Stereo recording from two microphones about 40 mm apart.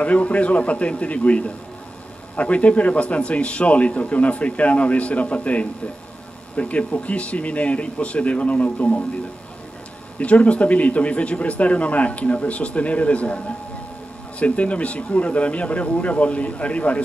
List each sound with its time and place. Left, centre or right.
0.0 s a man's voice: left
10.1 s a man's voice: left
14.4 s a man's voice: left